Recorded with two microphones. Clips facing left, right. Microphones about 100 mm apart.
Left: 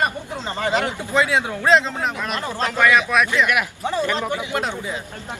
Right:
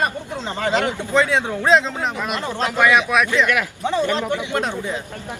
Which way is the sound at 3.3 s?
15° left (ahead or behind).